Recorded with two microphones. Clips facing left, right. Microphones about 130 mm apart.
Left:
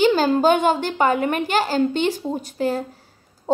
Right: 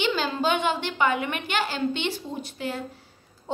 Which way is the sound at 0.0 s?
40° left (ahead or behind).